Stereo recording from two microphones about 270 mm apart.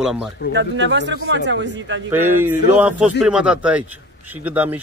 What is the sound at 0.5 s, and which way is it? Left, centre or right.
Speech, right.